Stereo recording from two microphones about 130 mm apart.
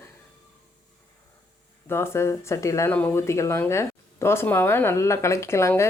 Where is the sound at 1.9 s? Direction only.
20° left (ahead or behind).